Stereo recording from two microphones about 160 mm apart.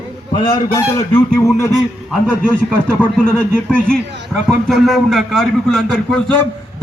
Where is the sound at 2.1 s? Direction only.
5° left (ahead or behind).